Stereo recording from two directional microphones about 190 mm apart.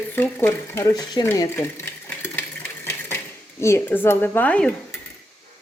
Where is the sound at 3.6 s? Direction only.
10° left (ahead or behind).